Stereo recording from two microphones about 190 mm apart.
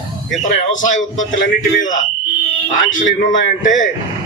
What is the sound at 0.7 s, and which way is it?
Speech, 40° left (ahead or behind).